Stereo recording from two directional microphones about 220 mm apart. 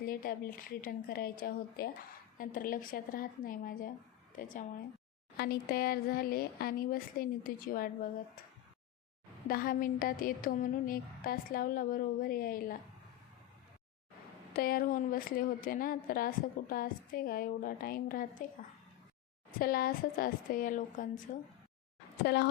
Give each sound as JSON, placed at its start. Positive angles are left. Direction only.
{"t": 0.0, "sound": "a woman's voice", "side_deg": 40}
{"t": 9.5, "sound": "a woman's voice", "side_deg": 40}
{"t": 14.5, "sound": "a woman's voice", "side_deg": 40}
{"t": 19.5, "sound": "a woman's voice", "side_deg": 40}
{"t": 22.2, "sound": "speech", "side_deg": 50}